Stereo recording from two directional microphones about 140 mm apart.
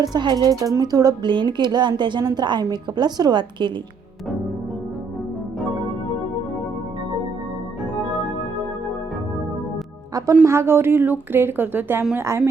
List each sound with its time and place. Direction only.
0.0 s speech: 30° right (ahead or behind)
10.4 s a woman's voice: 20° right (ahead or behind)